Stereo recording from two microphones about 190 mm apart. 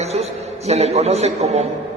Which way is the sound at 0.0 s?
35° right (ahead or behind).